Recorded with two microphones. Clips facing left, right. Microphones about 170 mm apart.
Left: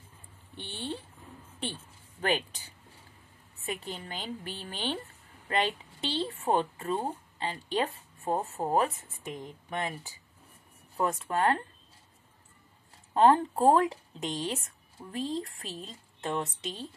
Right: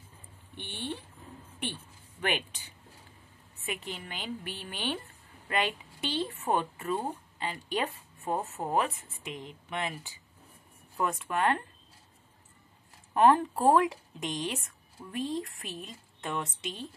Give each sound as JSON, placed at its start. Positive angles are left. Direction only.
{"t": 0.6, "sound": "speech", "side_deg": -15}
{"t": 2.2, "sound": "speech", "side_deg": 35}
{"t": 13.1, "sound": "speech", "side_deg": 30}